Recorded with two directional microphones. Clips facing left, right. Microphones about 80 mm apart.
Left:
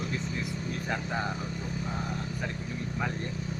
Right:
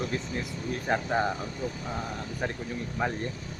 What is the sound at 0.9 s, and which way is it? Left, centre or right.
Speech, right.